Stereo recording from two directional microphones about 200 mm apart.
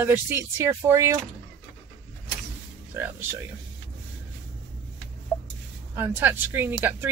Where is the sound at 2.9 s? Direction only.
10° right (ahead or behind).